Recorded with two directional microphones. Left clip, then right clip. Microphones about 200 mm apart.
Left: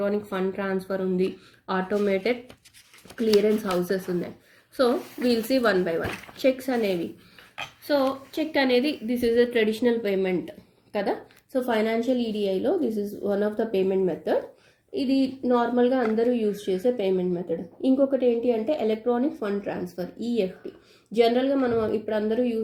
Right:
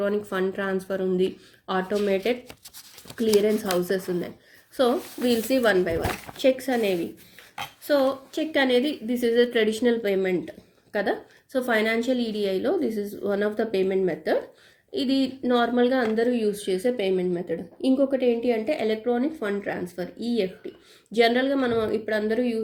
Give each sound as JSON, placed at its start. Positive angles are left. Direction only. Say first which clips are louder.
{"t": 0.0, "sound": "a woman's voice", "louder": "right 1 dB", "side_deg": -35}
{"t": 11.7, "sound": "speech", "louder": "right 1 dB", "side_deg": -30}
{"t": 15.0, "sound": "a woman's voice", "louder": "even", "side_deg": -35}